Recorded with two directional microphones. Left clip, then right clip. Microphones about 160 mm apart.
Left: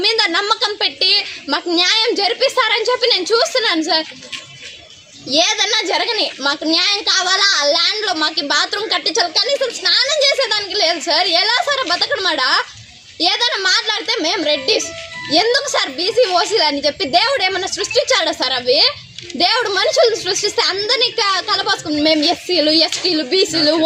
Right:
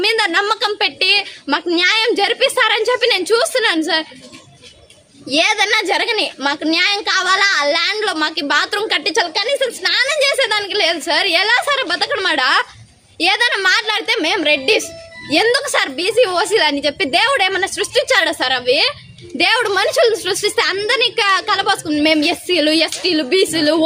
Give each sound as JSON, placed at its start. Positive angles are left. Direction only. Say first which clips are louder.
{"t": 0.0, "sound": "a sound", "louder": "even", "side_deg": -35}
{"t": 0.3, "sound": "a woman's voice", "louder": "even", "side_deg": -35}
{"t": 1.0, "sound": "a woman's voice", "louder": "even", "side_deg": -5}
{"t": 1.5, "sound": "a woman's voice", "louder": "even", "side_deg": -35}
{"t": 5.3, "sound": "a woman's voice", "louder": "right 1 dB", "side_deg": -35}
{"t": 21.9, "sound": "a woman's voice", "louder": "right 1 dB", "side_deg": -5}
{"t": 22.2, "sound": "a woman's voice", "louder": "even", "side_deg": -35}